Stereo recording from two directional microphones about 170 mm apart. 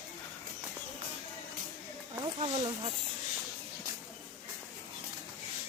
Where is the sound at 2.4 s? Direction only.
30° right (ahead or behind).